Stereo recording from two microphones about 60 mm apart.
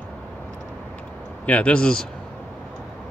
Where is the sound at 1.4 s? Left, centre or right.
Left.